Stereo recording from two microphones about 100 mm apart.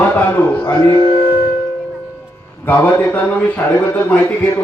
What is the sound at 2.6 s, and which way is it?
A man's voice, 15° left (ahead or behind).